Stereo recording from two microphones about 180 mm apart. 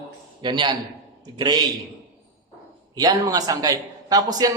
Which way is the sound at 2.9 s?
20° right (ahead or behind).